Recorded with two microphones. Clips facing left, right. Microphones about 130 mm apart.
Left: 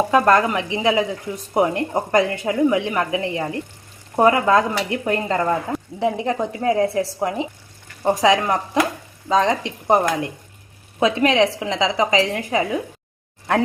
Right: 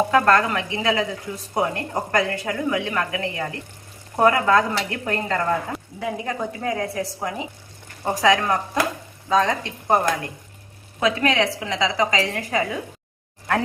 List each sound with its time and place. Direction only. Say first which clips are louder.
0.1 s speech: left 2 dB; 15° left (ahead or behind)